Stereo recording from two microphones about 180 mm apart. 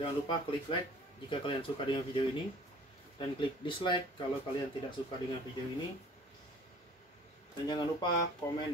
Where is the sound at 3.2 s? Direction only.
25° left (ahead or behind).